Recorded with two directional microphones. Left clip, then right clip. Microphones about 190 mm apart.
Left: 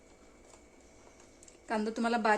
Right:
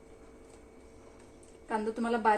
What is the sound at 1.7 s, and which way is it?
Speech, 60° left (ahead or behind).